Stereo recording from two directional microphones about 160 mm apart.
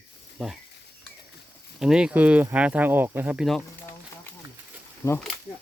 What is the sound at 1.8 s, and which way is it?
Speech, 5° right (ahead or behind).